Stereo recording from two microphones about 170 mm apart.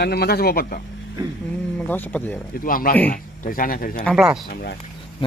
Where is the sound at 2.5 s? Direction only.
55° left (ahead or behind).